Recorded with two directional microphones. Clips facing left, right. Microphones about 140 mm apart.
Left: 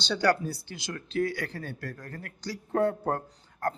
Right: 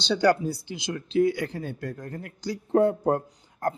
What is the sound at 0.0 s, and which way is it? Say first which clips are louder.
Speech: right 4 dB; 15° right (ahead or behind).